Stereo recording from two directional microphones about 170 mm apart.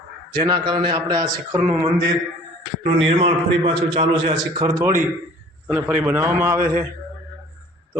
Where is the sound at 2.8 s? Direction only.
35° right (ahead or behind).